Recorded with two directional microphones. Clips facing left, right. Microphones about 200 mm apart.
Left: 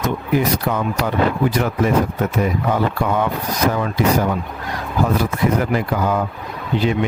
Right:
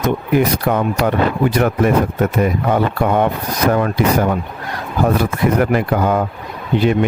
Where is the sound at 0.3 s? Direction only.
55° right (ahead or behind).